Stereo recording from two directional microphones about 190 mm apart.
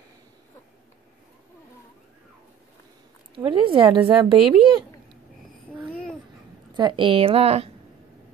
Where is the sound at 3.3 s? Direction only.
25° right (ahead or behind).